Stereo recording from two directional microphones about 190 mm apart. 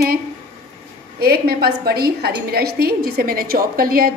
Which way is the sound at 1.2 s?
55° right (ahead or behind).